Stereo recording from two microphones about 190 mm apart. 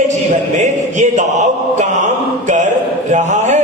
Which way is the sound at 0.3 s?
40° right (ahead or behind).